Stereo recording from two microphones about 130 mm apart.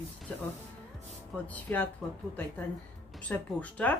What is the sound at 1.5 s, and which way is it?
Speech, 10° left (ahead or behind).